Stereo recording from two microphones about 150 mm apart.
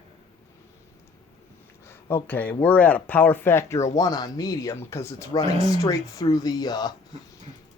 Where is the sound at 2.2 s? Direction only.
10° left (ahead or behind); by 6.9 s 25° left (ahead or behind).